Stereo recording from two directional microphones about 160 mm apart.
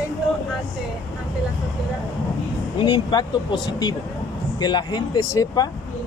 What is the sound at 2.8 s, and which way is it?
Speech, 30° left (ahead or behind).